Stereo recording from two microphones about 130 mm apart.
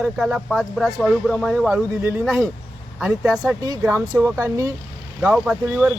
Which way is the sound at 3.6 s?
25° right (ahead or behind).